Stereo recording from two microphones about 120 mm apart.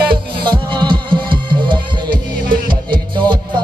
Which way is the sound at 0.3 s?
40° right (ahead or behind).